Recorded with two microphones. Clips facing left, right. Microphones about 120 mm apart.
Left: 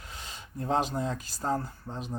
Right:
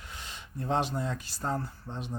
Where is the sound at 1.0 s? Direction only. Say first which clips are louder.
Left 2 dB; 40° left (ahead or behind).